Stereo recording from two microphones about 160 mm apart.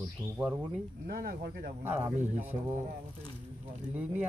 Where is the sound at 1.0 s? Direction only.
70° right (ahead or behind).